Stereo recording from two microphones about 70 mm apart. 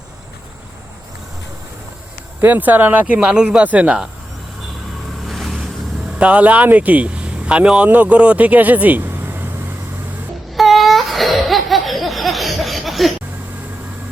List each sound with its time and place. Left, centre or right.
2.4 s speech: right
5.2 s vehicle: centre
6.1 s a man's voice: centre
10.5 s laughter: centre